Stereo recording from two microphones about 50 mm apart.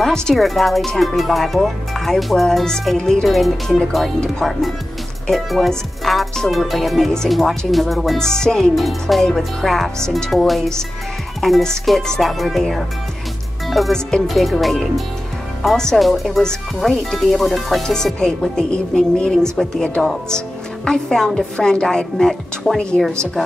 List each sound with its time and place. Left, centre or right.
0.3 s a woman's voice: centre
3.3 s a woman's voice: centre
10.3 s speech: centre
13.7 s music: centre
14.2 s a woman's voice: centre
16.0 s speech: centre
17.8 s a woman's voice: centre